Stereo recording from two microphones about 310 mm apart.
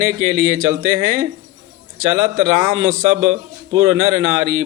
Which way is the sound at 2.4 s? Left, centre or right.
Right.